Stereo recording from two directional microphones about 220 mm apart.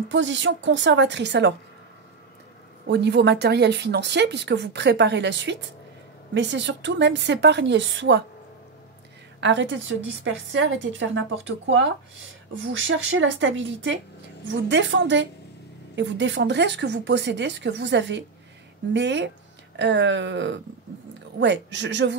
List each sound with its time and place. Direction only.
0.1 s a woman's voice: 55° right (ahead or behind)
2.9 s a woman's voice: 50° right (ahead or behind)
9.4 s a woman's voice: 55° right (ahead or behind)